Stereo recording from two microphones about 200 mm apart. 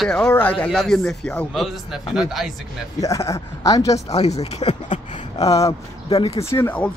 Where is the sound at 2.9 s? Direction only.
15° left (ahead or behind).